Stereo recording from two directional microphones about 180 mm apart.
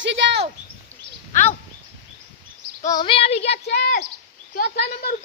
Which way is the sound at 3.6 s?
60° left (ahead or behind).